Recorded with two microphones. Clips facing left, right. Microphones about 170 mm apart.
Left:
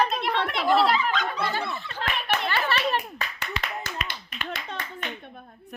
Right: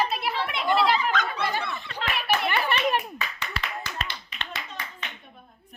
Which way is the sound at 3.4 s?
50° left (ahead or behind).